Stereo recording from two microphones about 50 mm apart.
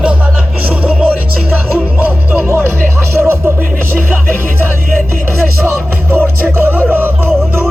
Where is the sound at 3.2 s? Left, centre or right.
Right.